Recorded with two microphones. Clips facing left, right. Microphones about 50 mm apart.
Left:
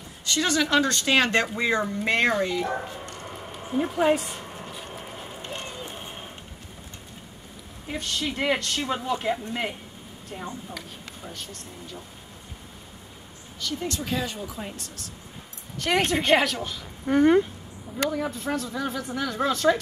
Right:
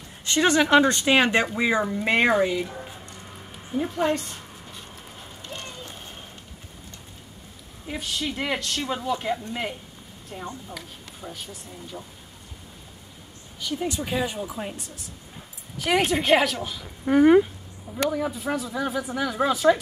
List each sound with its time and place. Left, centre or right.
0.2 s speech: right
2.6 s speech: left
3.9 s speech: centre
5.0 s run: left
7.8 s speech: centre
11.2 s speech: centre
13.6 s speech: centre
15.8 s speech: centre